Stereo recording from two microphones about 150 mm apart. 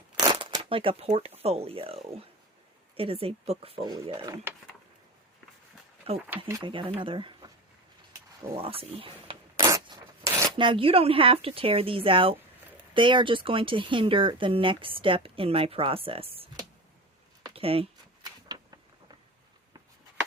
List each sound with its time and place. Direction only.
0.2 s speech: 35° right (ahead or behind)
4.2 s speech: 15° right (ahead or behind)
6.1 s speech: 40° right (ahead or behind)
8.5 s speech: 40° right (ahead or behind)
17.5 s a sound: 40° right (ahead or behind)
18.4 s a sound: 25° right (ahead or behind)